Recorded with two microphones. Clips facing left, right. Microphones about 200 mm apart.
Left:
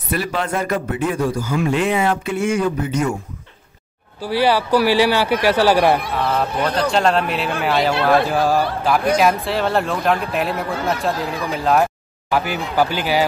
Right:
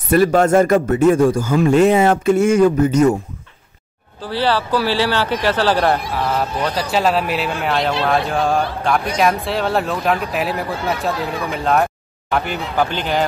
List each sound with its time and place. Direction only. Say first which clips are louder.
0.1 s a man's voice: right 9 dB; 45° right (ahead or behind)
4.2 s speech: left 2 dB; 10° left (ahead or behind)
6.1 s speech: even; centre (ahead or behind)